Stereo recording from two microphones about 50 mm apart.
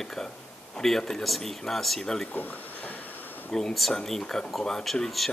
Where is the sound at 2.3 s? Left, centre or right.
Left.